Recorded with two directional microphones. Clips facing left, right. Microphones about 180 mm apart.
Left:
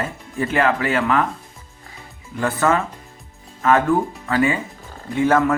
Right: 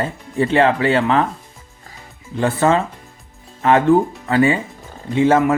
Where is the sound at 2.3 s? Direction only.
25° right (ahead or behind).